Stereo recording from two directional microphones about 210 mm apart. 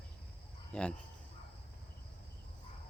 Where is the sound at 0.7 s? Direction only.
5° left (ahead or behind).